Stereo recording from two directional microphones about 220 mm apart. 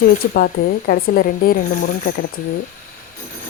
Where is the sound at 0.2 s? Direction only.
45° left (ahead or behind).